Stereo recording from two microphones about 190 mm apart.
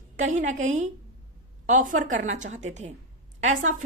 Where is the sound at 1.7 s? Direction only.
40° right (ahead or behind).